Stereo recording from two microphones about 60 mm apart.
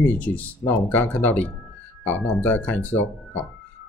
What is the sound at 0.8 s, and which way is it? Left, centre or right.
Speech, left.